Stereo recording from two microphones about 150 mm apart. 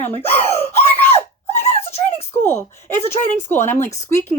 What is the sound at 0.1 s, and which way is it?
Speech, 45° left (ahead or behind).